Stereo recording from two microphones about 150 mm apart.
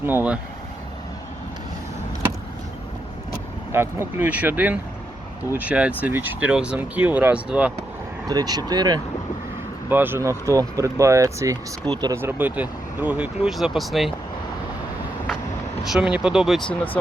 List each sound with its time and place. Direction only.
0.0 s speech: 15° right (ahead or behind)
3.7 s speech: 15° right (ahead or behind)
8.3 s speech: 25° right (ahead or behind)
9.9 s speech: 15° right (ahead or behind)
12.1 s speech: 15° right (ahead or behind)
15.8 s speech: 5° right (ahead or behind)